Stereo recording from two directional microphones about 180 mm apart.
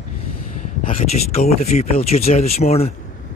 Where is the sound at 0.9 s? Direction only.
35° left (ahead or behind).